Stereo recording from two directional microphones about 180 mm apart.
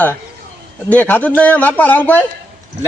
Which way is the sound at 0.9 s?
10° left (ahead or behind).